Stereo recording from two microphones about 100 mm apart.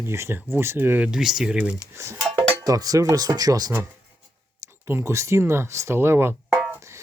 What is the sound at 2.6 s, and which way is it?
Speech, 40° right (ahead or behind).